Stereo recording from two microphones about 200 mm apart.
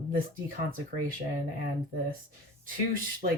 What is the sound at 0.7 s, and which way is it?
Speech, 45° right (ahead or behind).